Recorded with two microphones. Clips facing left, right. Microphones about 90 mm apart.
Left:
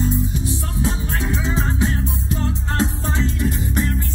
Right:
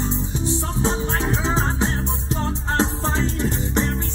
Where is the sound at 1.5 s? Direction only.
30° right (ahead or behind).